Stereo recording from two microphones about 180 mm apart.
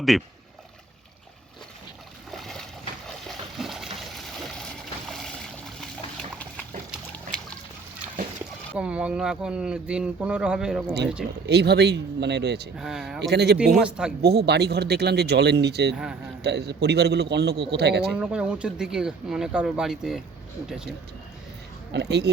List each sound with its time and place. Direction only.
0.1 s speech: centre (ahead or behind)
2.3 s boat: centre (ahead or behind)
3.1 s splash: centre (ahead or behind)
3.9 s boat: centre (ahead or behind)
6.1 s a sound: 5° left (ahead or behind)
8.7 s speech: 5° right (ahead or behind)
11.4 s a man's voice: 65° right (ahead or behind)
12.7 s speech: centre (ahead or behind)
13.2 s a man's voice: 65° right (ahead or behind)
13.7 s speech: 5° right (ahead or behind)
14.2 s a man's voice: 65° right (ahead or behind)
18.1 s speech: 5° right (ahead or behind)
21.9 s a man's voice: 65° right (ahead or behind)